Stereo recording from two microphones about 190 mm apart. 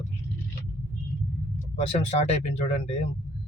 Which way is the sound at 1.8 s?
35° left (ahead or behind).